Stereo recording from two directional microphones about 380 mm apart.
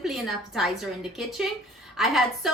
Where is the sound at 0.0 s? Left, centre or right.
Centre.